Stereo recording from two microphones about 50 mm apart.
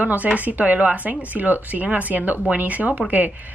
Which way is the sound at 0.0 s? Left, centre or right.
Right.